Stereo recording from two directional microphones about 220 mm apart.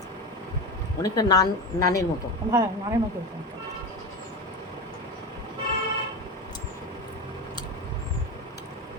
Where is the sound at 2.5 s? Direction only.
15° right (ahead or behind).